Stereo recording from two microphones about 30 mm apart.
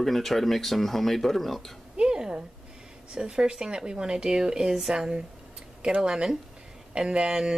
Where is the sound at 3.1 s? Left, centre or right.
Right.